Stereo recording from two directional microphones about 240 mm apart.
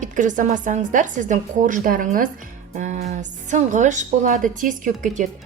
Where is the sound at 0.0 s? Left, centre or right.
Right.